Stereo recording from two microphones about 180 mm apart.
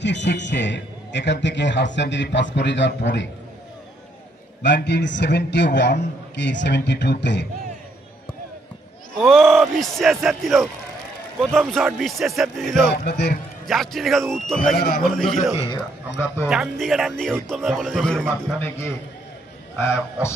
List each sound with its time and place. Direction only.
0.0 s a man's voice: 75° left (ahead or behind)
4.6 s a man's voice: 70° left (ahead or behind)
9.2 s a man's voice: centre (ahead or behind)
13.0 s a man's voice: 65° left (ahead or behind)
13.7 s a man's voice: centre (ahead or behind)
19.8 s a man's voice: 15° left (ahead or behind)